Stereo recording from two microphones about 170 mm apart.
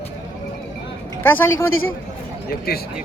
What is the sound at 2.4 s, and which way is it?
Speech, 65° left (ahead or behind).